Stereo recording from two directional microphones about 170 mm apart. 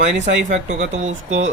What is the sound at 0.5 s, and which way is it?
Speech, 45° right (ahead or behind).